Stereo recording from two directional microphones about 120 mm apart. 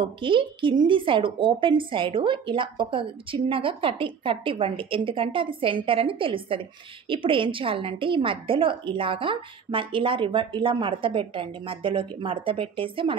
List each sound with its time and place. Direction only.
0.0 s a woman's voice: 45° right (ahead or behind)